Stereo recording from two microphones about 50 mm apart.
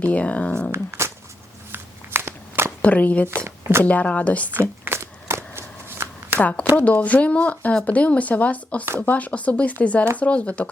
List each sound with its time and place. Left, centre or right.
0.0 s speech: left
0.7 s a sound: right
1.7 s a sound: right
2.8 s speech: left
3.2 s speech: right
3.8 s speech: left
4.9 s shuffling cards: right
6.4 s speech: left